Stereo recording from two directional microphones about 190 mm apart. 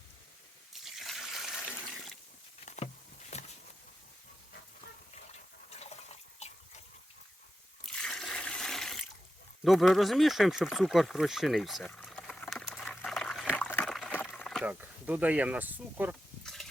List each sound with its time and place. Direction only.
0.7 s water: centre (ahead or behind)
2.6 s patter: 35° left (ahead or behind)
5.8 s water: 35° left (ahead or behind)
7.9 s water: 5° left (ahead or behind)
9.6 s speech: centre (ahead or behind)
11.9 s liquid: 5° left (ahead or behind)
13.5 s a sound: 10° left (ahead or behind)
14.6 s speech: 10° right (ahead or behind)
16.4 s a sound: centre (ahead or behind)